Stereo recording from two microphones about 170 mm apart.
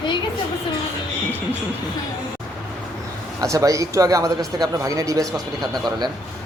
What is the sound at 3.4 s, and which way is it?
Speech, 20° right (ahead or behind).